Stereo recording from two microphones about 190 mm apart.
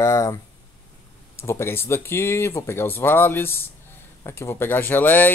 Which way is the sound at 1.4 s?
15° left (ahead or behind).